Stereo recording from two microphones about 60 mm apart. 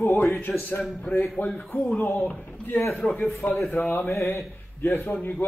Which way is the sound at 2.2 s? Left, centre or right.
Left.